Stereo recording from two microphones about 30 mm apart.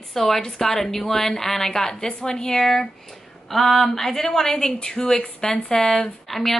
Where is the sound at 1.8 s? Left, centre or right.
Left.